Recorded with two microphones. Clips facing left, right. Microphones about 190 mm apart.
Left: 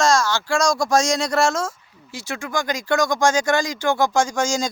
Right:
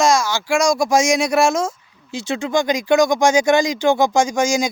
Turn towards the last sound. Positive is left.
turn(degrees=-15)  # may be behind; listen again after turning